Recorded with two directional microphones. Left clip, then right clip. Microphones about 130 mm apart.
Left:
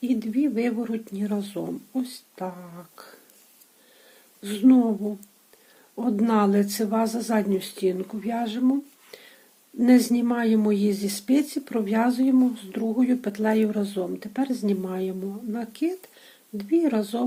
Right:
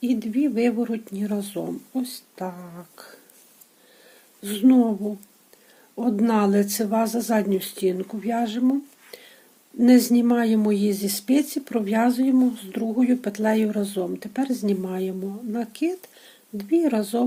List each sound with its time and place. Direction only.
0.0 s speech: 30° right (ahead or behind)
4.4 s speech: 30° right (ahead or behind)